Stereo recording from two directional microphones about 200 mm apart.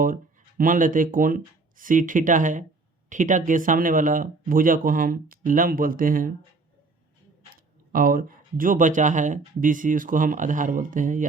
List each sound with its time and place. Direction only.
0.6 s speech: 40° right (ahead or behind)
7.5 s speech: 45° right (ahead or behind)